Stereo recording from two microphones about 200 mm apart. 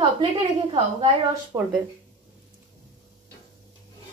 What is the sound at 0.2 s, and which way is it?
A woman's voice, 25° right (ahead or behind).